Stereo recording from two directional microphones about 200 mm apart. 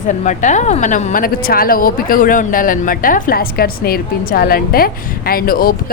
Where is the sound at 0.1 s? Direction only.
35° left (ahead or behind).